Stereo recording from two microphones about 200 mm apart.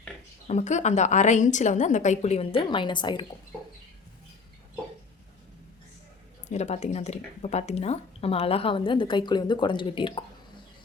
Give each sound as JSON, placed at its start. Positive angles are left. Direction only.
{"t": 0.4, "sound": "a woman's voice", "side_deg": 35}
{"t": 6.5, "sound": "a woman's voice", "side_deg": 35}